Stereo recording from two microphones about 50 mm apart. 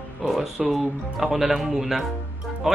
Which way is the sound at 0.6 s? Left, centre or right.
Centre.